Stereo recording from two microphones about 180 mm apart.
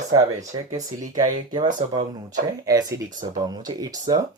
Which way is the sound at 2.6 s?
20° right (ahead or behind).